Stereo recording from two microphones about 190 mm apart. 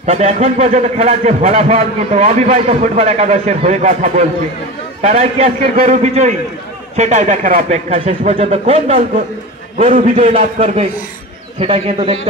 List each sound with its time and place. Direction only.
0.0 s a man's voice: 35° right (ahead or behind)
9.9 s a man's voice: 40° right (ahead or behind)